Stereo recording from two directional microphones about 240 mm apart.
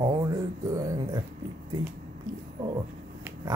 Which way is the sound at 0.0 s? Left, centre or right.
Centre.